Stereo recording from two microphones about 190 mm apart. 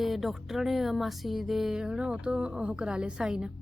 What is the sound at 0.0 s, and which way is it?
A woman's voice, centre (ahead or behind).